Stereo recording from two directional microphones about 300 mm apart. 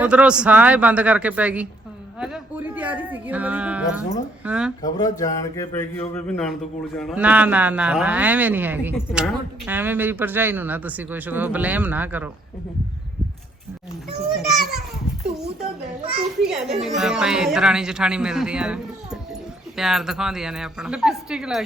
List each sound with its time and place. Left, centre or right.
0.0 s speech: centre
4.8 s speech: centre
14.3 s a sound: centre
16.0 s a child's voice: centre
16.4 s speech: centre